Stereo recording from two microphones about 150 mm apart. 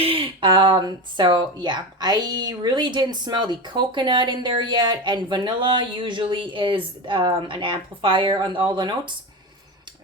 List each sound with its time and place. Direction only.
0.0 s speech: 35° right (ahead or behind)